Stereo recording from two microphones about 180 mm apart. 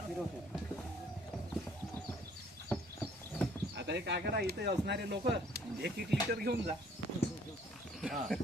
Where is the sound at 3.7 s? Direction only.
70° right (ahead or behind).